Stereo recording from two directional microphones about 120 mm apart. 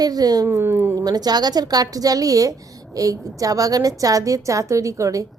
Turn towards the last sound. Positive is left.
turn(degrees=-25)  # may be behind; listen again after turning